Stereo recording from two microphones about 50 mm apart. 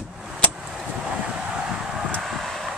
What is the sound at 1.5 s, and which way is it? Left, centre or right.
Vehicle, centre.